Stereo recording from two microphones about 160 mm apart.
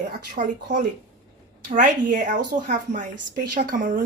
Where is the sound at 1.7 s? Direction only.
55° right (ahead or behind).